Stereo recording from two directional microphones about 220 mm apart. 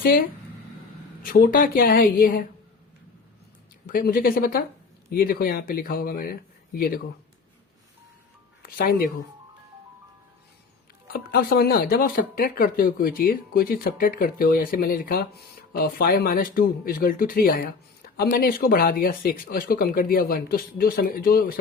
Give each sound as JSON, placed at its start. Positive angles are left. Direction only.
{"t": 0.0, "sound": "speech", "side_deg": 40}
{"t": 3.8, "sound": "speech", "side_deg": 40}
{"t": 8.6, "sound": "speech", "side_deg": 40}
{"t": 11.1, "sound": "speech", "side_deg": 40}